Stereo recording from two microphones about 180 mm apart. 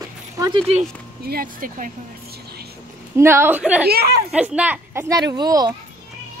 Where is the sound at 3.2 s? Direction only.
15° right (ahead or behind).